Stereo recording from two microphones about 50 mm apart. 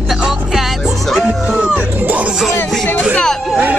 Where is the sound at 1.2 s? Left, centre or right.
Centre.